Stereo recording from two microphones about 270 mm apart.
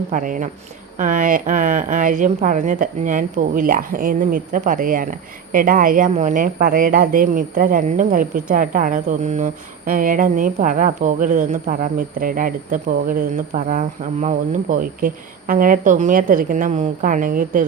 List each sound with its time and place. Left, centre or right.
0.1 s speech: right